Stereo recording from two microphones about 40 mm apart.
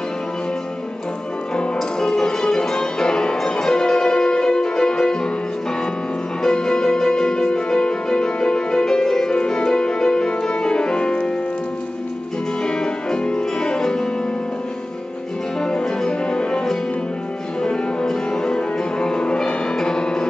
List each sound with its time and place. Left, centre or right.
1.8 s music: centre
6.4 s music: centre
12.6 s music: centre
15.6 s music: centre